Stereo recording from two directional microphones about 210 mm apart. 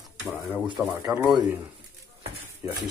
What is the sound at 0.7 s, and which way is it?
Speech, 5° right (ahead or behind).